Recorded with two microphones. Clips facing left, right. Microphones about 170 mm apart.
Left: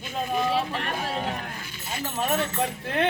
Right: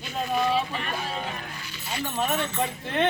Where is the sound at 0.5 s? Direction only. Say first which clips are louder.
Left 1 dB; 75° left (ahead or behind).